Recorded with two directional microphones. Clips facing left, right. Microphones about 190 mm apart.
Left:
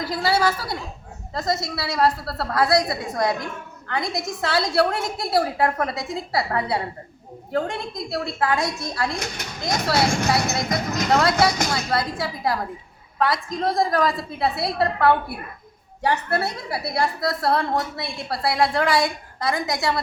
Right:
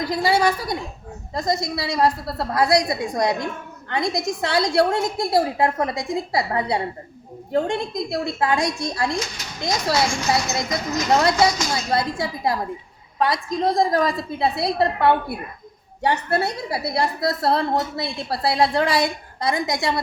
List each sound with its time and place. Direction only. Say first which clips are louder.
0.0 s a woman's voice: right 2 dB; 20° right (ahead or behind)
9.0 s speech: right 2 dB; 60° left (ahead or behind)
11.1 s a woman's voice: right 1 dB; 20° right (ahead or behind)
11.3 s speech: right 1 dB; 60° left (ahead or behind)
11.9 s a woman's voice: right 2 dB; 20° right (ahead or behind)